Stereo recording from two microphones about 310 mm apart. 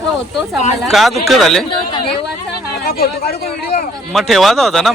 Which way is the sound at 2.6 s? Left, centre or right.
Left.